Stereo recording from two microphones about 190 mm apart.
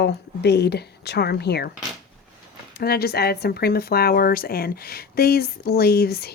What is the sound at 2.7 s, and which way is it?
Speech, 55° left (ahead or behind).